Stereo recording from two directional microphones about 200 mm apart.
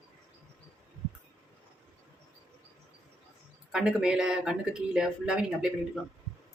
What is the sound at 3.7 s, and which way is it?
Speech, 5° right (ahead or behind).